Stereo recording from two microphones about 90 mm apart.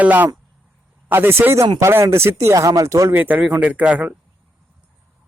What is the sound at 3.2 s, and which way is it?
Speech, 20° right (ahead or behind).